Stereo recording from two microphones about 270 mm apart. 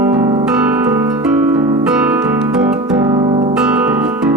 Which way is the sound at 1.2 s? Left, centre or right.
Centre.